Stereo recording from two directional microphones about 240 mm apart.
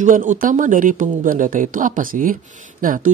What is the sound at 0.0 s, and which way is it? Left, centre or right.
Speech, right.